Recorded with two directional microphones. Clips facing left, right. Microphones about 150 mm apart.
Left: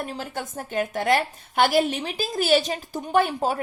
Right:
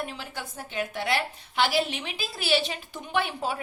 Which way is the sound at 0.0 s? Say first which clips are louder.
Left 4 dB; 45° left (ahead or behind).